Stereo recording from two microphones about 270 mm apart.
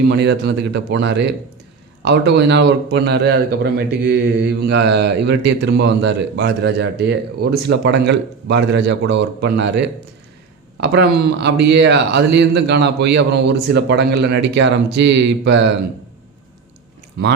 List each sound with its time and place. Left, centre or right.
0.1 s a man's voice: right